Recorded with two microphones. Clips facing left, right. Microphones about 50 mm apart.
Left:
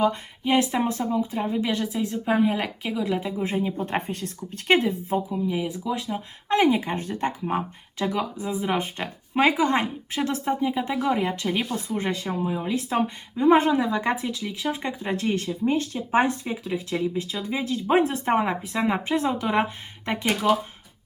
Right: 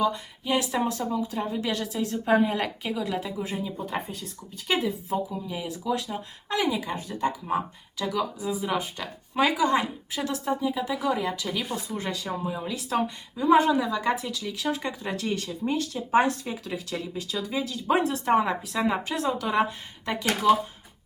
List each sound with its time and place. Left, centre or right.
0.0 s speech: left
2.1 s speech: centre
3.0 s speech: centre
3.4 s speech: left
4.7 s speech: left
5.1 s speech: centre
6.5 s speech: left
13.4 s speech: left